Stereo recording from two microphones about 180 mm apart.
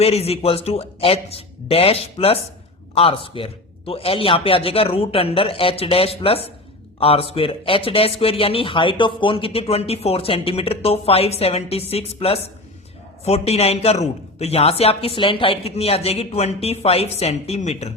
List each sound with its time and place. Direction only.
0.0 s speech: 35° left (ahead or behind)